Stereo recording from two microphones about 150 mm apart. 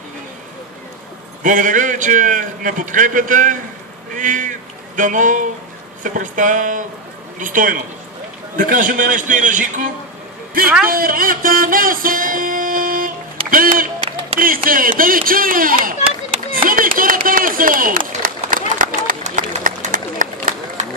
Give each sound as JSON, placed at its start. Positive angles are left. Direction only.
{"t": 1.4, "sound": "a man's voice", "side_deg": -60}
{"t": 10.9, "sound": "music", "side_deg": -75}
{"t": 13.5, "sound": "speech", "side_deg": -70}
{"t": 16.5, "sound": "a sound", "side_deg": -70}